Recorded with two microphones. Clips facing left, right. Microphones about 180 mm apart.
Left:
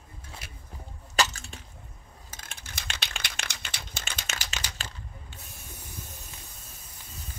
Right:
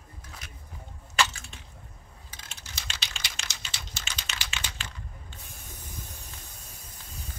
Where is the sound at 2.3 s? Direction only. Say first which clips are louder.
Left 2 dB; 50° left (ahead or behind).